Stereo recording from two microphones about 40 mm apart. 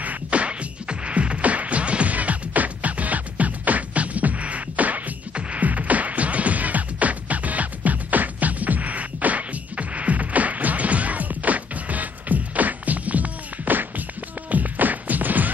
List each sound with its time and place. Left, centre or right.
0.0 s music: right
5.3 s music: right